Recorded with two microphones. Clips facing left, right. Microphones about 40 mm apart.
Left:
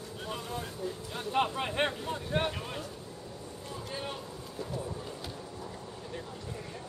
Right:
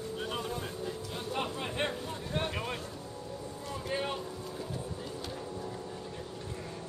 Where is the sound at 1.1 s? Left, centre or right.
Left.